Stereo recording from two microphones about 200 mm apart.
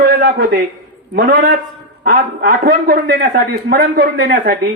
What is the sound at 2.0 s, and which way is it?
Speech, 50° right (ahead or behind).